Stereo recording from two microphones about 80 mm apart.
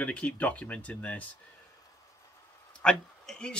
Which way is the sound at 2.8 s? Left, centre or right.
Centre.